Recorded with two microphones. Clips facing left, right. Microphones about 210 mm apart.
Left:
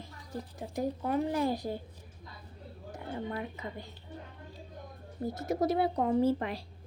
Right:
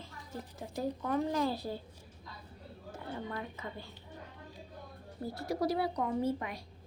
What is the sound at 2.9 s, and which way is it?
Speech, 15° left (ahead or behind).